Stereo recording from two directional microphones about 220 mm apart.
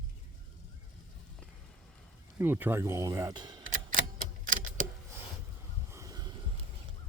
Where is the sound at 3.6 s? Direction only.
35° right (ahead or behind).